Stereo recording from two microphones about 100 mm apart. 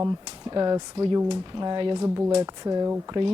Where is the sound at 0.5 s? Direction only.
40° right (ahead or behind).